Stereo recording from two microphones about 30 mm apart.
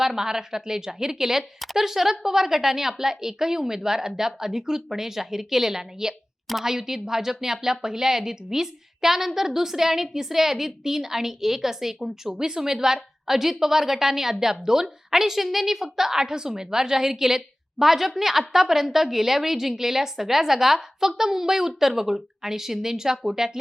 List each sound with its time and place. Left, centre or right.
0.0 s a woman's voice: centre
16.2 s a woman's voice: right